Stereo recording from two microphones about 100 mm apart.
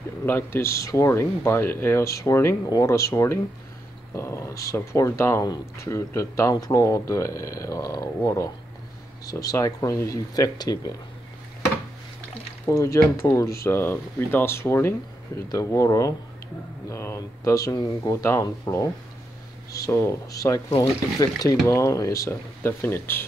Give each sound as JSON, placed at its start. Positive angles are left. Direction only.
{"t": 0.2, "sound": "speech", "side_deg": 20}
{"t": 12.6, "sound": "speech", "side_deg": 30}
{"t": 19.9, "sound": "speech", "side_deg": 25}